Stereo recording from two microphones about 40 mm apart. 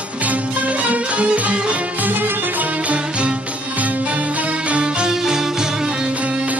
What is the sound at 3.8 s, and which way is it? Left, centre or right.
Music, right.